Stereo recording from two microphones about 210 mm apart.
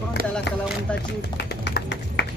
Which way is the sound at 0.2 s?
45° right (ahead or behind).